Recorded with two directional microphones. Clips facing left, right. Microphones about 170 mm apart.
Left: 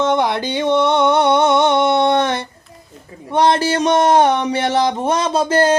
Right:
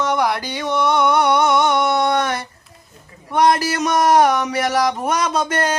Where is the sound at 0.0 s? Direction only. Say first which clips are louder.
Left 3 dB; 25° left (ahead or behind).